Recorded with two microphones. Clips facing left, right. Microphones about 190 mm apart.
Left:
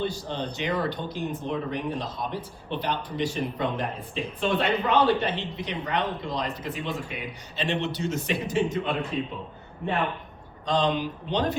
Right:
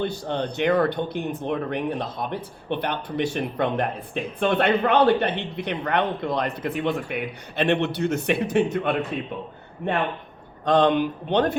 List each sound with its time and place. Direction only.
0.0 s speech: 60° right (ahead or behind)
10.7 s speech: 60° right (ahead or behind)